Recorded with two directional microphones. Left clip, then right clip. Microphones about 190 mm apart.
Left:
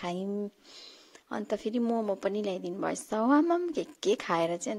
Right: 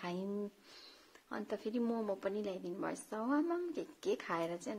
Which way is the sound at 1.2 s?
40° left (ahead or behind).